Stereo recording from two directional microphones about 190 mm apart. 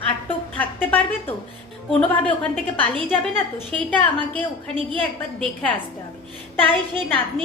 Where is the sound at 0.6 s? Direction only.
10° left (ahead or behind).